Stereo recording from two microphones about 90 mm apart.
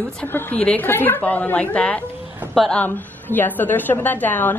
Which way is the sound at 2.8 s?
20° left (ahead or behind).